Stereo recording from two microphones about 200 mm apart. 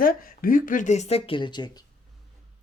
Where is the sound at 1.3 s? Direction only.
25° left (ahead or behind).